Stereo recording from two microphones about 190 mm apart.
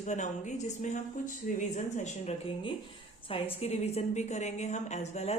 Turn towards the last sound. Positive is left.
turn(degrees=35)  # may be behind; listen again after turning